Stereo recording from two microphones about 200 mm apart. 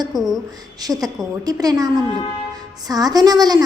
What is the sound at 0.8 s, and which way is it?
A woman's voice, 20° right (ahead or behind).